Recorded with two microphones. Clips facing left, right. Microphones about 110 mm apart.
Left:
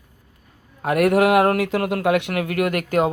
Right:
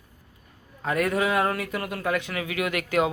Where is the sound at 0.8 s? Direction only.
65° left (ahead or behind).